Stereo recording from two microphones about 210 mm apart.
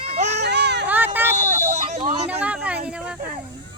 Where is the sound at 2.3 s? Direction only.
5° right (ahead or behind).